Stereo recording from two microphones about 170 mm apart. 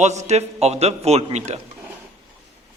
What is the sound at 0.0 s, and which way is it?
A man's voice, 40° right (ahead or behind).